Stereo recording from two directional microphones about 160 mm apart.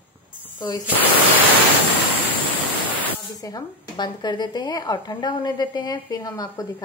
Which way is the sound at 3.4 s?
25° left (ahead or behind).